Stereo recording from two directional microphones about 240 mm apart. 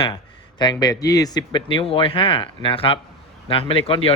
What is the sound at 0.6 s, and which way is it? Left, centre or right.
Speech, centre.